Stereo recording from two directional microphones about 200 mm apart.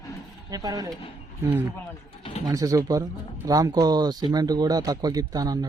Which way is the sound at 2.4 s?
15° right (ahead or behind).